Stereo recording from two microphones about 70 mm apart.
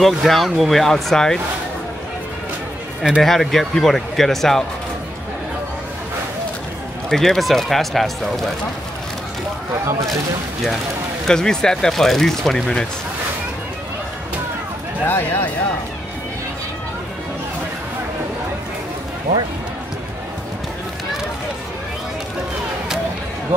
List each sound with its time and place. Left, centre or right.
0.0 s speech: centre
3.2 s speech: centre
7.1 s speech: centre
11.2 s speech: centre
15.0 s speech: left